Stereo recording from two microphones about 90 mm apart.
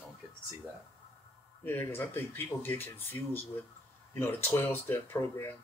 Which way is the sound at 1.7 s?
25° left (ahead or behind).